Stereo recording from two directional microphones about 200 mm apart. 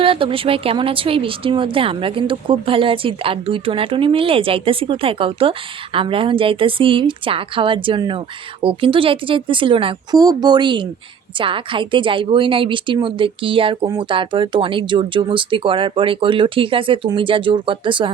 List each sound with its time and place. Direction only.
0.0 s speech: 25° right (ahead or behind)